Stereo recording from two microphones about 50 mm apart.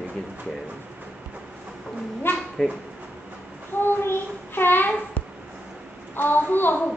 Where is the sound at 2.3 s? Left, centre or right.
Left.